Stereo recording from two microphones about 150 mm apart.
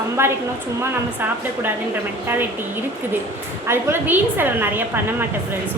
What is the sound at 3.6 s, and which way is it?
A woman's voice, 15° right (ahead or behind).